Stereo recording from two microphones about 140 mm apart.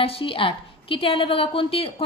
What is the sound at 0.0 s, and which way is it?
A woman's voice, 40° left (ahead or behind).